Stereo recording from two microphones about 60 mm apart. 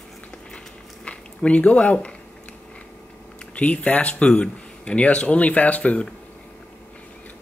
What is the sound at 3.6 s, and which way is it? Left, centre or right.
Speech, left.